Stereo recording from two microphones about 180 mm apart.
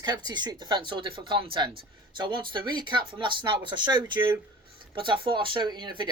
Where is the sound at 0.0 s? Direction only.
20° right (ahead or behind).